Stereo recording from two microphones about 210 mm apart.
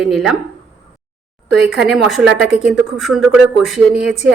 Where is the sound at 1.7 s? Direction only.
5° right (ahead or behind).